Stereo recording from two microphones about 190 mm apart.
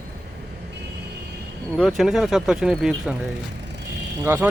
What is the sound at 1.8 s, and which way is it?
Speech, centre (ahead or behind).